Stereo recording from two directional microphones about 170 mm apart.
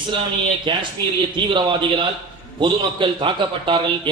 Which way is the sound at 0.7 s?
30° right (ahead or behind).